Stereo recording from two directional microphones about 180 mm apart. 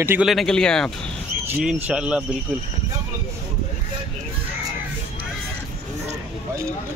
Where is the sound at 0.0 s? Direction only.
10° right (ahead or behind).